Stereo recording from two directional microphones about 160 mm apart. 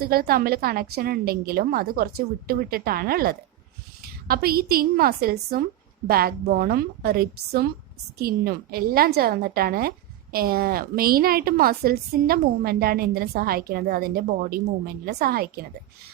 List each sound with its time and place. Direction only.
0.0 s a woman's voice: 70° right (ahead or behind)